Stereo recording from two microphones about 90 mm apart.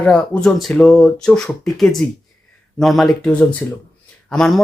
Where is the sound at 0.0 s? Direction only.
10° left (ahead or behind).